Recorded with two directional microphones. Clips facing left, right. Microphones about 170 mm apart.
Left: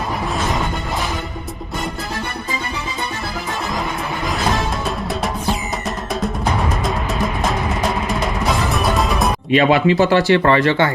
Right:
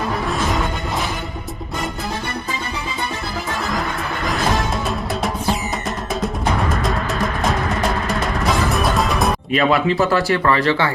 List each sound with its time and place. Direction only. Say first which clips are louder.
8.7 s music: even; centre (ahead or behind)
9.8 s speech: left 3 dB; 70° left (ahead or behind)
10.4 s speech: left 2 dB; 25° left (ahead or behind)